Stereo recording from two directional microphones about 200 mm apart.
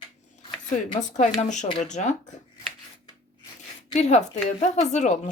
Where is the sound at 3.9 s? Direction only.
35° left (ahead or behind).